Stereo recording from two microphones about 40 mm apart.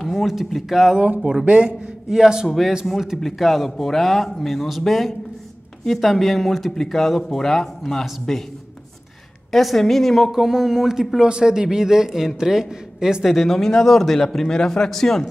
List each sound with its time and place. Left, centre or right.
0.0 s speech: centre
1.4 s a man's voice: right
2.0 s a man's voice: centre
2.4 s speech: centre
9.5 s speech: centre
10.3 s a man's voice: centre
11.2 s a man's voice: right
13.2 s speech: centre